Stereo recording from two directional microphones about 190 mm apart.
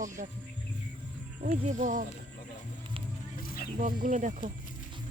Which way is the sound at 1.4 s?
40° right (ahead or behind).